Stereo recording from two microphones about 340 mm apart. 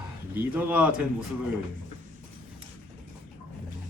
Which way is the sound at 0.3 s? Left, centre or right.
Centre.